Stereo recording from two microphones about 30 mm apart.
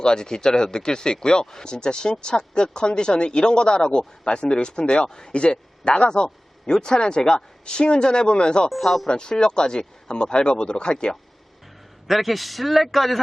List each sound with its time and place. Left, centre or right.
0.0 s speech: left
5.0 s speech: left
5.3 s speech: left
10.9 s speech: left
12.0 s a man's voice: centre